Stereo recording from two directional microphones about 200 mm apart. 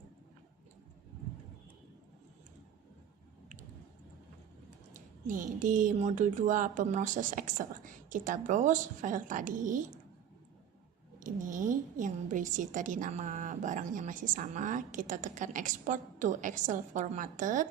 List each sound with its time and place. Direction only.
4.9 s a woman's voice: 40° right (ahead or behind)
11.2 s a woman's voice: 40° right (ahead or behind)